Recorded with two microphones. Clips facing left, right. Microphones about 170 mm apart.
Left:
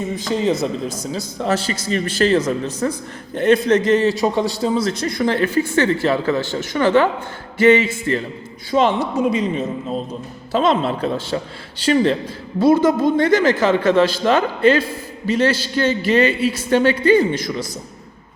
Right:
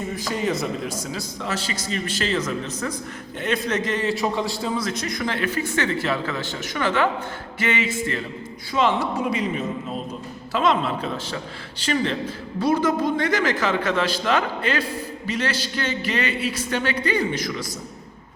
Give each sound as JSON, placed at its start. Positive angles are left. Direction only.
{"t": 0.2, "sound": "a man's voice", "side_deg": 25}
{"t": 1.4, "sound": "speech", "side_deg": 50}
{"t": 2.4, "sound": "a man's voice", "side_deg": 35}